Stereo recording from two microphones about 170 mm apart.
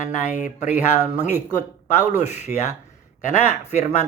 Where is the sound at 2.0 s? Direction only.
45° left (ahead or behind).